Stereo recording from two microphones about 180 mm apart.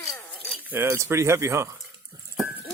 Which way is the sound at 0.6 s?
10° right (ahead or behind).